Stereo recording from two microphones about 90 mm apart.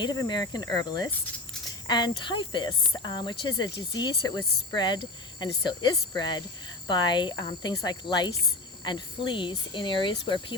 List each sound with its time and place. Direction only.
0.0 s speech: 50° left (ahead or behind)